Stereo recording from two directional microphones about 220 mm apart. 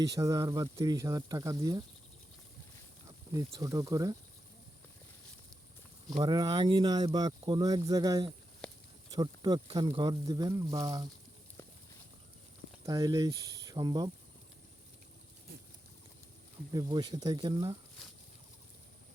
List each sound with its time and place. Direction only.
0.0 s speech: 15° right (ahead or behind)
3.5 s speech: 15° right (ahead or behind)
6.1 s speech: 20° right (ahead or behind)
12.8 s speech: 15° right (ahead or behind)
16.7 s speech: 20° right (ahead or behind)
18.0 s a sound: centre (ahead or behind)